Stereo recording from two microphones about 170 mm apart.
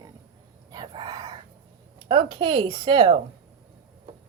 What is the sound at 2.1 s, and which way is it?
A woman's voice, 30° right (ahead or behind).